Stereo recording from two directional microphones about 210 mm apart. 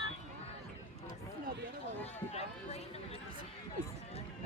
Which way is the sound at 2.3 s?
30° left (ahead or behind).